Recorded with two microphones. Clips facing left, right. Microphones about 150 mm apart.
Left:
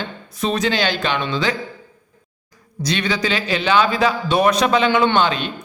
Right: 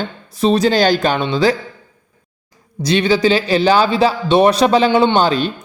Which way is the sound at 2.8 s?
30° right (ahead or behind).